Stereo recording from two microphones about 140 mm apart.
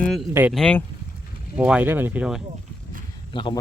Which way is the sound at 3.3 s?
35° left (ahead or behind).